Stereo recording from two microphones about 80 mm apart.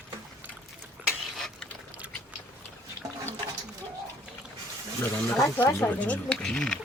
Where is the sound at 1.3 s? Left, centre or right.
Centre.